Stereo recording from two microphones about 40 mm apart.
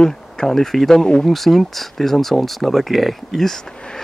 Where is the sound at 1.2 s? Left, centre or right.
Centre.